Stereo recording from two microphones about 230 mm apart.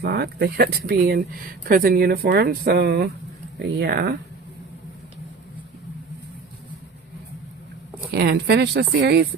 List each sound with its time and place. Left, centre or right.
0.0 s a woman's voice: right
8.1 s a woman's voice: right